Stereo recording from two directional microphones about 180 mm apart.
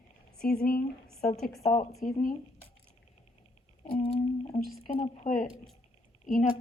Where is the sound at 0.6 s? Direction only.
55° left (ahead or behind).